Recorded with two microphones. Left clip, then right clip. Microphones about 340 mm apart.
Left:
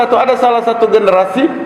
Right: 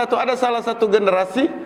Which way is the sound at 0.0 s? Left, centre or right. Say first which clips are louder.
Left 9 dB; right.